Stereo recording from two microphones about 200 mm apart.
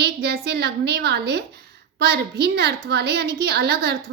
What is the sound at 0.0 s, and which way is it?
A woman's voice, 55° right (ahead or behind).